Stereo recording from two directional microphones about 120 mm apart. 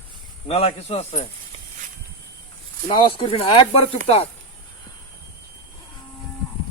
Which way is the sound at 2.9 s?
45° left (ahead or behind).